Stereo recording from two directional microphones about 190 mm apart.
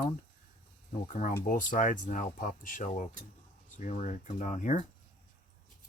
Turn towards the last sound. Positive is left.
turn(degrees=40)  # may be behind; listen again after turning